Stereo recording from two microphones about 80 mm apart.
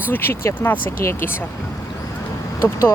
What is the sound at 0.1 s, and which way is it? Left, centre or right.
Speech, left.